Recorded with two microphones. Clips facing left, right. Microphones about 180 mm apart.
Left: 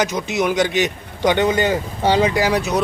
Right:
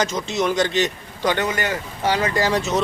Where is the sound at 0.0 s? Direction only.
15° left (ahead or behind).